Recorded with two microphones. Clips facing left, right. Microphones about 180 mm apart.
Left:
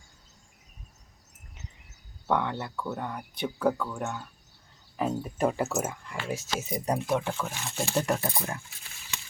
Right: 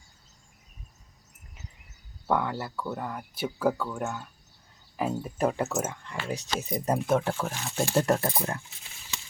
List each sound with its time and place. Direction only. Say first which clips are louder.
2.2 s speech: even; 5° right (ahead or behind)
8.0 s speech: right 3 dB; 40° right (ahead or behind)